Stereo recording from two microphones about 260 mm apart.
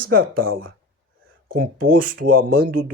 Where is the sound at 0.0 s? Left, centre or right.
Right.